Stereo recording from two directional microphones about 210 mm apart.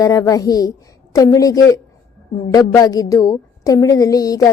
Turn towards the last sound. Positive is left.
turn(degrees=15)  # may be behind; listen again after turning